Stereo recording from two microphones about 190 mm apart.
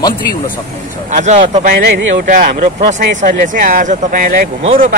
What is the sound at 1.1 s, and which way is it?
Speech, 35° right (ahead or behind).